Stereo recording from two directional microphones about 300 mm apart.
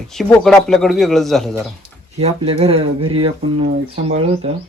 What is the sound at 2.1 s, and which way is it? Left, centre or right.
Speech, centre.